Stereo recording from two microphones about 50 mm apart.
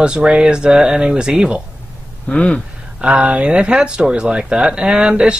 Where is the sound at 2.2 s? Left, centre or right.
Left.